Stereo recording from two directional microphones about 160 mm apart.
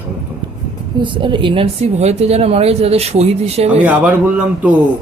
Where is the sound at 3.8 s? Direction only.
10° right (ahead or behind).